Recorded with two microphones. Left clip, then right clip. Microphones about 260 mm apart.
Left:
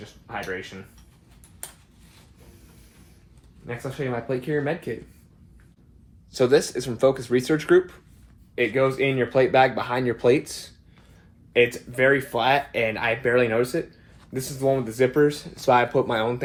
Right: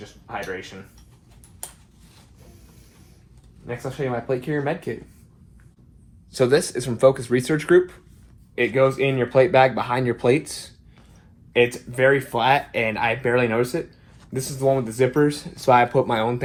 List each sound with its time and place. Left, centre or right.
0.0 s speech: centre
1.6 s a sound: centre
3.7 s speech: centre
6.3 s speech: right
14.3 s speech: right
14.7 s speech: right